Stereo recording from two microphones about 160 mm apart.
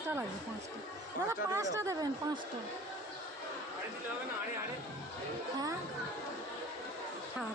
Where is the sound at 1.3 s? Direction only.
20° right (ahead or behind).